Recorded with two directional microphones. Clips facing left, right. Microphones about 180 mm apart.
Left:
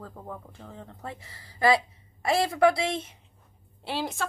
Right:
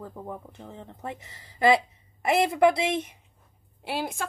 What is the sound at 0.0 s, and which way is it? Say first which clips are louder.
A woman's voice: right 3 dB; 15° right (ahead or behind).